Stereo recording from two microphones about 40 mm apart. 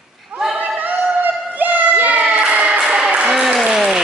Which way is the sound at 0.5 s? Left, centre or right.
Right.